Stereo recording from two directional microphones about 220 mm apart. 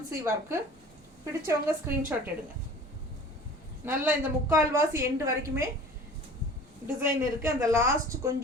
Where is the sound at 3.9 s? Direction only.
10° right (ahead or behind).